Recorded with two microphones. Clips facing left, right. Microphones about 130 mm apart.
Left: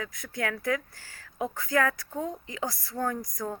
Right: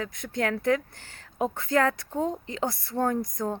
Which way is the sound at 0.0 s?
25° right (ahead or behind).